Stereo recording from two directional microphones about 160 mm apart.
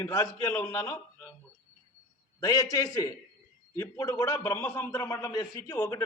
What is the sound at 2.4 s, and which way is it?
A man's voice, 20° left (ahead or behind).